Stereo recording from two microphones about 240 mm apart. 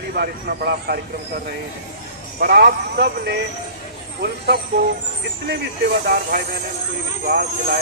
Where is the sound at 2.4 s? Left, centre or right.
Right.